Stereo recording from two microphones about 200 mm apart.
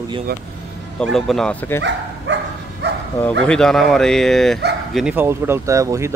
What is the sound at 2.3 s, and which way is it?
Dog, 60° right (ahead or behind).